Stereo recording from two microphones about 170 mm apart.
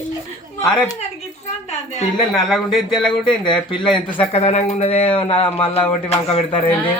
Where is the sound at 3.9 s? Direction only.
35° left (ahead or behind).